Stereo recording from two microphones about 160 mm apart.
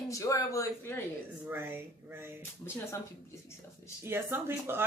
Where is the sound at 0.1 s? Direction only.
20° left (ahead or behind).